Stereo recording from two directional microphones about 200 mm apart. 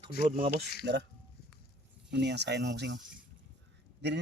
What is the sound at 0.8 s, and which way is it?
Speech, 60° right (ahead or behind).